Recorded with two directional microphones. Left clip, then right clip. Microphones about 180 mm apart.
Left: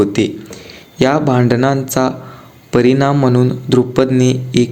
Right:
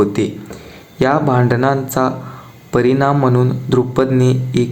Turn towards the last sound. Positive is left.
turn(degrees=25)  # may be behind; listen again after turning